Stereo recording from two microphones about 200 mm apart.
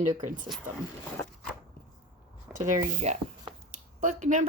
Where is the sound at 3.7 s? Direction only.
40° right (ahead or behind).